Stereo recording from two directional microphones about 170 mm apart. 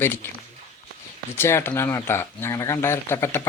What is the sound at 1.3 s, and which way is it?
Speech, 15° left (ahead or behind).